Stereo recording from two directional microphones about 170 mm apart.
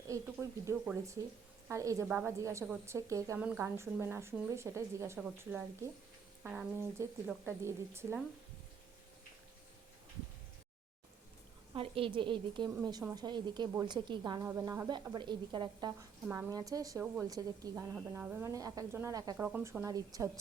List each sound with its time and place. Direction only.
0.1 s a woman's voice: 15° right (ahead or behind)
11.7 s a woman's voice: 30° right (ahead or behind)
17.9 s a woman's voice: 10° right (ahead or behind)
19.5 s a woman's voice: 10° right (ahead or behind)